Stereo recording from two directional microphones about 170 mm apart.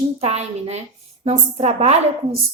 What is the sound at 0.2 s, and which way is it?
A woman's voice, 40° right (ahead or behind).